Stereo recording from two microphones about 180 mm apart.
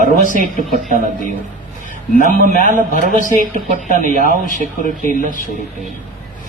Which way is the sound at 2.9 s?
50° left (ahead or behind).